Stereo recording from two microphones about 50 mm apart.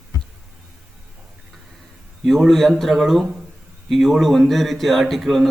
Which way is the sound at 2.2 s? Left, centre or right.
Centre.